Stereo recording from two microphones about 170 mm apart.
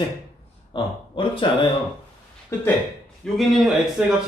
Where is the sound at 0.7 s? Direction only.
30° left (ahead or behind).